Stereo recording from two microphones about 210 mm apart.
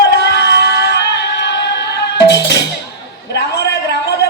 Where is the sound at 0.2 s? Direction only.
55° left (ahead or behind).